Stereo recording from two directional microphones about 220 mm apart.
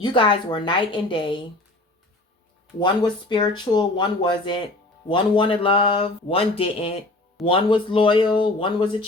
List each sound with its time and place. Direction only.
0.0 s speech: 20° left (ahead or behind)
2.8 s speech: 20° left (ahead or behind)